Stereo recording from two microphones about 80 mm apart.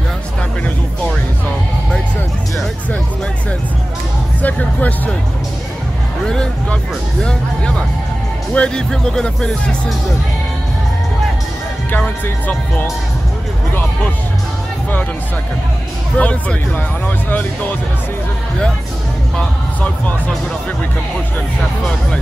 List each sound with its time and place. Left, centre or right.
4.4 s music: centre
6.2 s a sound: centre
7.2 s speech: centre
11.9 s speech: centre
16.2 s speech: centre
19.3 s speech: centre
21.5 s speech: centre